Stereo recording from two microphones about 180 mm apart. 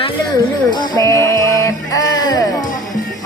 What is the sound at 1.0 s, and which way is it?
Speech, 15° left (ahead or behind).